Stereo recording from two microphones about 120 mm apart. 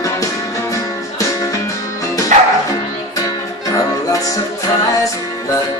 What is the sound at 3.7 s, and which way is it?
Music, 30° left (ahead or behind).